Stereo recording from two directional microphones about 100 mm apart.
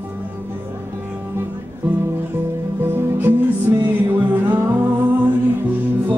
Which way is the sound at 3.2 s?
20° right (ahead or behind).